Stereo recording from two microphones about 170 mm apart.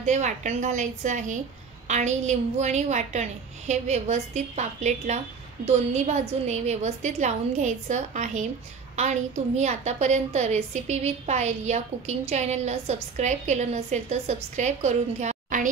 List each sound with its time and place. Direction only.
0.0 s a woman's voice: 45° right (ahead or behind)